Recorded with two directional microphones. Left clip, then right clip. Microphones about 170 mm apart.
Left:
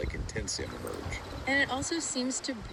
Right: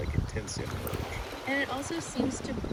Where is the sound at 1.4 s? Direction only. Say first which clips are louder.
Left 3 dB; 45° left (ahead or behind).